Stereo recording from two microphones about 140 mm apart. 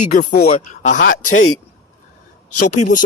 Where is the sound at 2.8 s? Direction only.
70° left (ahead or behind).